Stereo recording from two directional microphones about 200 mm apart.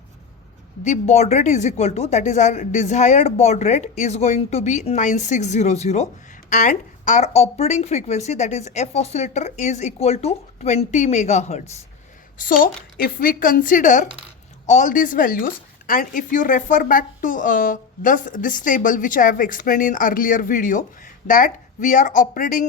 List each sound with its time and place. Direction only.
0.9 s a woman's voice: 35° left (ahead or behind)
12.4 s a woman's voice: 45° left (ahead or behind)